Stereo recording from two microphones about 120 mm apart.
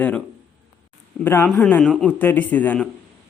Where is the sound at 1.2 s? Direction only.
20° left (ahead or behind).